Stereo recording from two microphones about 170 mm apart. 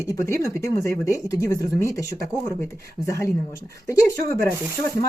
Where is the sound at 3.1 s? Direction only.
15° left (ahead or behind).